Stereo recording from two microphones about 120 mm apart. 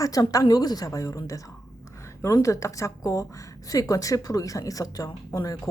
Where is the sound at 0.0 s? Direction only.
30° left (ahead or behind).